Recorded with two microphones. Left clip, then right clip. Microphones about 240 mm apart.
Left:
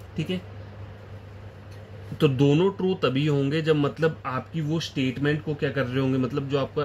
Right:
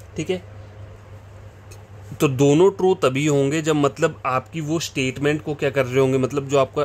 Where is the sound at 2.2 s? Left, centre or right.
Right.